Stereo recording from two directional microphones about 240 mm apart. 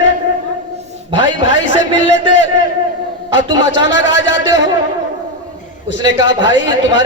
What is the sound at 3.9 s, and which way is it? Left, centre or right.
Speech, left.